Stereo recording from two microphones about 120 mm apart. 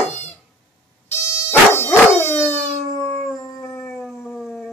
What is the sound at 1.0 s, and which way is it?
Dog, 20° left (ahead or behind).